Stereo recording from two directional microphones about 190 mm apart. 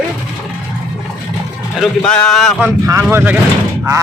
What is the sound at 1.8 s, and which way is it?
Speech, 5° left (ahead or behind).